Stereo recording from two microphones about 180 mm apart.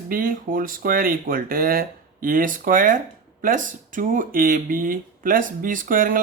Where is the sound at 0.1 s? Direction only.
50° right (ahead or behind).